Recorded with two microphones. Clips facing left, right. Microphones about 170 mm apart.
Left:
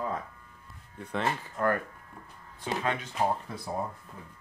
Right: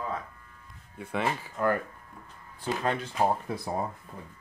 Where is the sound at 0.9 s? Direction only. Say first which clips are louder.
Right 1 dB; 10° right (ahead or behind).